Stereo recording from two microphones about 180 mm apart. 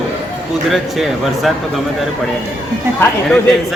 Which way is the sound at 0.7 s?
Centre (ahead or behind).